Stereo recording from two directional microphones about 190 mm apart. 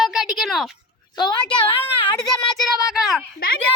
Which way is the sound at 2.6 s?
Centre (ahead or behind).